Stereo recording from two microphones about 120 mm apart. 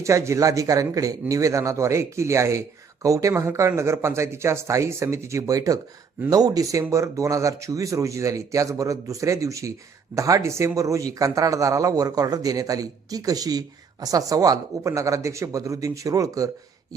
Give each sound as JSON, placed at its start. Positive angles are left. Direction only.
{"t": 0.0, "sound": "a man's voice", "side_deg": -25}